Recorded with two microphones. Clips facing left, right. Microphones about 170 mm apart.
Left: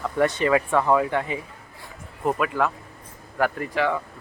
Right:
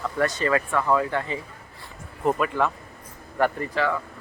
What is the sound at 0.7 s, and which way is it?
Speech, 20° left (ahead or behind).